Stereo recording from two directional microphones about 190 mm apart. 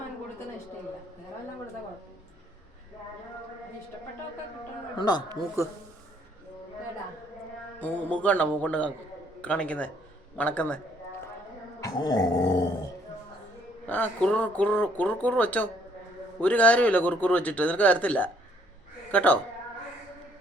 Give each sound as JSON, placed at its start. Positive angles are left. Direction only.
{"t": 4.9, "sound": "growling", "side_deg": 20}
{"t": 5.6, "sound": "speech", "side_deg": 15}
{"t": 7.8, "sound": "speech", "side_deg": 10}
{"t": 11.8, "sound": "growling", "side_deg": 20}
{"t": 13.8, "sound": "speech", "side_deg": 10}